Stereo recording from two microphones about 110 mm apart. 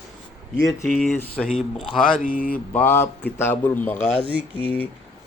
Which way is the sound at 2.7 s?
20° left (ahead or behind).